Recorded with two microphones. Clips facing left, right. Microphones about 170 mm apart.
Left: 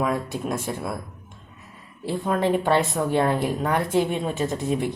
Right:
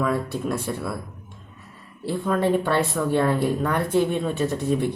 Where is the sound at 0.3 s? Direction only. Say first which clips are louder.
Right 1 dB; 60° right (ahead or behind).